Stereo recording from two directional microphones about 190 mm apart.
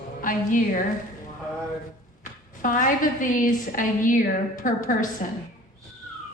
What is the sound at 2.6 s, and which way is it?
A woman's voice, 45° left (ahead or behind).